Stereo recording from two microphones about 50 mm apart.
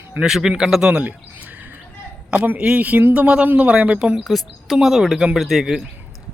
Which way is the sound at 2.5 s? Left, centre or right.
Right.